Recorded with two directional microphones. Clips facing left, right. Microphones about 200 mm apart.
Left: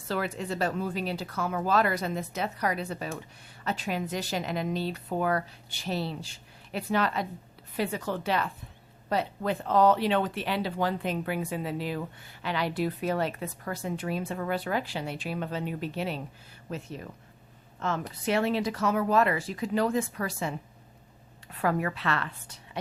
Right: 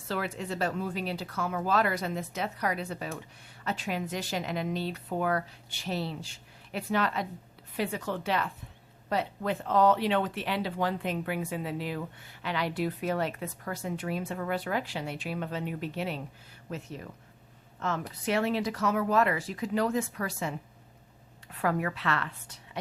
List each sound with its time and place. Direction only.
0.1 s a woman's voice: 40° left (ahead or behind)
21.6 s speech: 35° left (ahead or behind)